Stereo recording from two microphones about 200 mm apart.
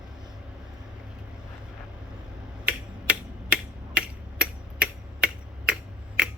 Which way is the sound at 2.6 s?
5° right (ahead or behind).